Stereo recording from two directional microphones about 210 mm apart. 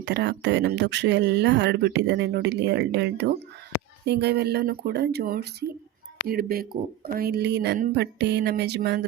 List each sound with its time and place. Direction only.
0.0 s speech: 55° right (ahead or behind)